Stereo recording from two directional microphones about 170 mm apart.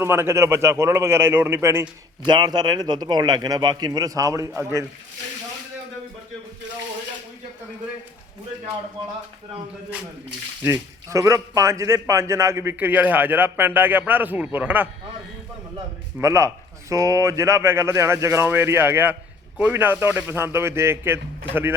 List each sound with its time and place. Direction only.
0.0 s a man's voice: 15° right (ahead or behind)
2.2 s a man's voice: 25° right (ahead or behind)
10.6 s a man's voice: 15° right (ahead or behind)
16.1 s a man's voice: 15° right (ahead or behind)